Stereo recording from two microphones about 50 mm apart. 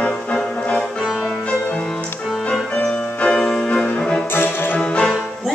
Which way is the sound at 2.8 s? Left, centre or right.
Left.